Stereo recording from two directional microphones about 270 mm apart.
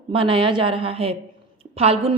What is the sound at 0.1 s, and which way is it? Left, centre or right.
A woman's voice, centre.